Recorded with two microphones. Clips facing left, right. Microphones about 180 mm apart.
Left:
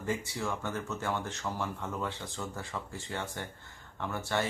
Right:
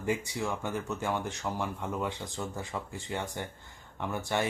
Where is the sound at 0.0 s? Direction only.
15° right (ahead or behind).